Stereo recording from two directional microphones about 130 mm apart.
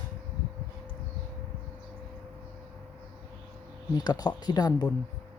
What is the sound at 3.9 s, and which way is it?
Speech, 30° left (ahead or behind).